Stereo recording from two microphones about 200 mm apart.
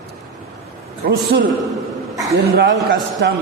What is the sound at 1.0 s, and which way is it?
Speech, 55° right (ahead or behind).